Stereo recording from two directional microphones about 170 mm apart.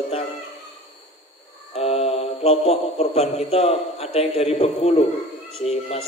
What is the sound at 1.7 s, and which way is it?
Mantra, 35° left (ahead or behind).